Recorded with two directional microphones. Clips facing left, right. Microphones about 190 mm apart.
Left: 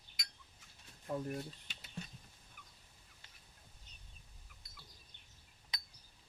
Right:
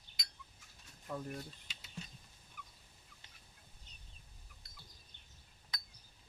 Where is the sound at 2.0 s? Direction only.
60° left (ahead or behind).